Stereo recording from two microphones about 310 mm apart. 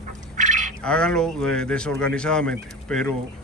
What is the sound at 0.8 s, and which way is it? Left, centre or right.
Speech, centre.